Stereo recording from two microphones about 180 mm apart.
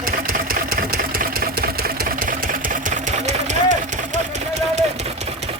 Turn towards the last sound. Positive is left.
turn(degrees=-45)  # may be behind; listen again after turning